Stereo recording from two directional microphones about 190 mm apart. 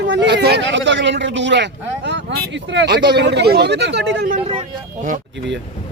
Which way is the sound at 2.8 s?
60° right (ahead or behind).